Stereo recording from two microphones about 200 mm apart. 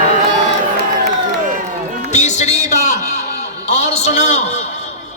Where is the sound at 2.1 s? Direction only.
35° left (ahead or behind).